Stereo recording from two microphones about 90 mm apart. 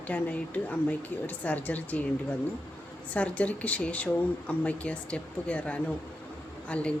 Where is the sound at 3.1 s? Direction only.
15° left (ahead or behind).